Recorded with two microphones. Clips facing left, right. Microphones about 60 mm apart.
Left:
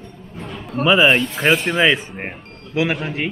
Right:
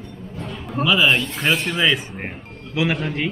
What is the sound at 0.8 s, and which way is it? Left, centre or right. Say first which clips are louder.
Speech: left 4 dB; centre.